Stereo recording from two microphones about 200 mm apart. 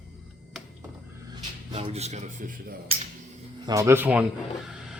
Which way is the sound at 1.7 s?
30° right (ahead or behind).